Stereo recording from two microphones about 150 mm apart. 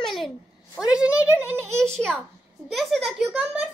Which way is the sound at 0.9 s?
10° right (ahead or behind).